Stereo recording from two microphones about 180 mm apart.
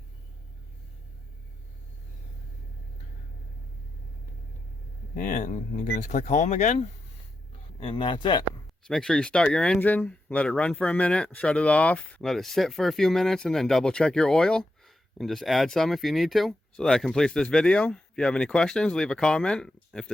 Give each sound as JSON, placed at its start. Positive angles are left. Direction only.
{"t": 5.1, "sound": "speech", "side_deg": 45}
{"t": 7.8, "sound": "speech", "side_deg": 30}
{"t": 8.8, "sound": "speech", "side_deg": 5}